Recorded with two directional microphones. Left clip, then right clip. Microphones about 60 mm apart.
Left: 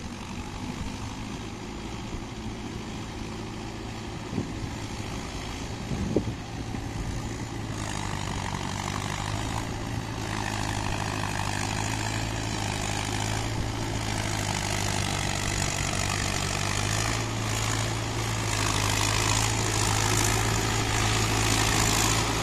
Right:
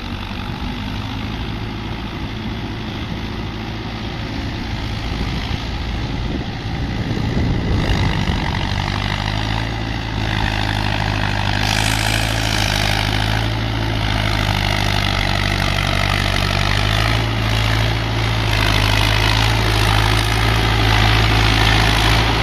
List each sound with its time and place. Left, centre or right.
7.8 s vehicle: left
10.3 s vehicle: left
11.7 s vehicle: centre; by 13.4 s left
14.0 s vehicle: left
19.7 s vehicle: left